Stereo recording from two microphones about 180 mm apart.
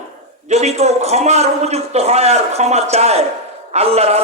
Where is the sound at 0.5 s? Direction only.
35° right (ahead or behind).